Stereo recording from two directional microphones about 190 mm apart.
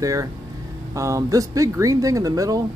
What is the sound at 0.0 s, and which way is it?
Speech, 15° right (ahead or behind).